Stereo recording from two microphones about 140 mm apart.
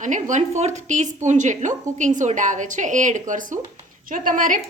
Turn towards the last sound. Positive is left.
turn(degrees=-70)  # may be behind; listen again after turning